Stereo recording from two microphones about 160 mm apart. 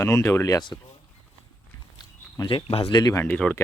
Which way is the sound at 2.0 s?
25° left (ahead or behind).